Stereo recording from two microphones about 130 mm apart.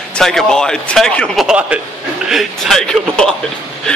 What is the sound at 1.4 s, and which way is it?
Speech, 10° right (ahead or behind).